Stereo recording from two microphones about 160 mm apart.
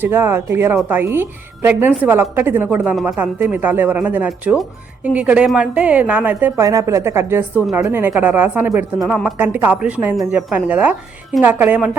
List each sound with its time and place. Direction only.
0.0 s a woman's voice: 15° right (ahead or behind)